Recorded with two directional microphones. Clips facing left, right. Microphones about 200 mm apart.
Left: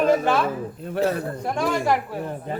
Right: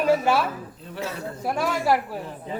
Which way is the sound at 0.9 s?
55° left (ahead or behind).